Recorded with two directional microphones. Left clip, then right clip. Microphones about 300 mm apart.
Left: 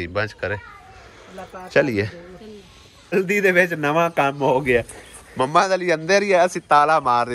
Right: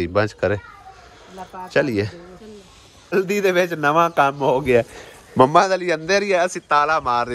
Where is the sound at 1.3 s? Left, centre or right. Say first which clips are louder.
Left 1 dB; centre.